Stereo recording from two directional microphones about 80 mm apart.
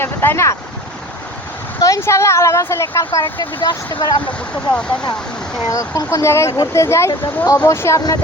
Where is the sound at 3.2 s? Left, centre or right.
Left.